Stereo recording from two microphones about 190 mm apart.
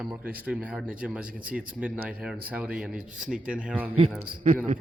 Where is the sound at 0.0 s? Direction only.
5° right (ahead or behind).